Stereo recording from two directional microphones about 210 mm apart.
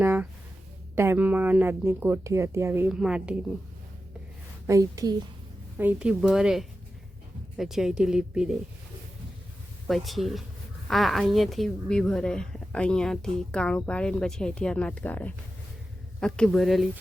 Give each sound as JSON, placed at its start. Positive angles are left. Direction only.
{"t": 0.0, "sound": "a sound", "side_deg": -10}
{"t": 0.9, "sound": "speech", "side_deg": -10}
{"t": 4.6, "sound": "speech", "side_deg": -15}
{"t": 5.7, "sound": "speech", "side_deg": -5}
{"t": 9.8, "sound": "speech", "side_deg": 0}